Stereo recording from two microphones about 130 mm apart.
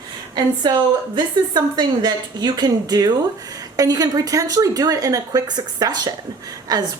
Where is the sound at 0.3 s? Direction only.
30° right (ahead or behind).